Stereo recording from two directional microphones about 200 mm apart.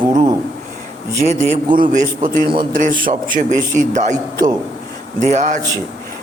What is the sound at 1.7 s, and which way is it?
A man's voice, 40° right (ahead or behind).